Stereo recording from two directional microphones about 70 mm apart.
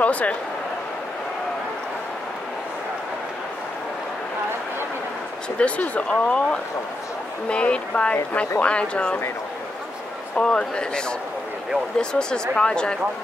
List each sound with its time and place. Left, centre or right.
0.0 s a man's voice: left
5.6 s speech: centre
10.3 s speech: centre